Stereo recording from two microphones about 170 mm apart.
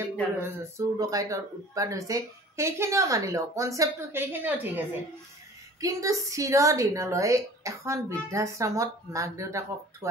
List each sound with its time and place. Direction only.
0.4 s a woman's voice: 20° right (ahead or behind)